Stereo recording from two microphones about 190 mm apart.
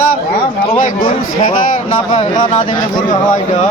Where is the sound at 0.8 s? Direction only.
45° left (ahead or behind).